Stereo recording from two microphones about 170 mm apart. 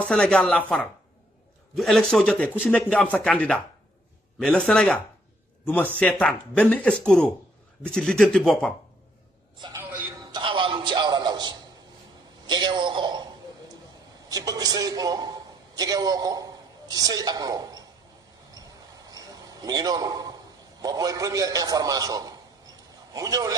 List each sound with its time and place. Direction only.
0.0 s speech: 5° left (ahead or behind)
10.3 s a sound: 30° right (ahead or behind)
20.8 s a man's voice: 20° right (ahead or behind)